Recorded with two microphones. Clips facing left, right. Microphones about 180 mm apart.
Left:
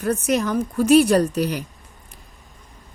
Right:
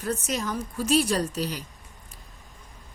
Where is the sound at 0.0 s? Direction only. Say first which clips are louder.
Left 8 dB; 60° left (ahead or behind).